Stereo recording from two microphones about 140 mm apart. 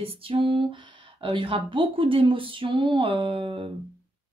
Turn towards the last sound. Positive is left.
turn(degrees=-40)  # may be behind; listen again after turning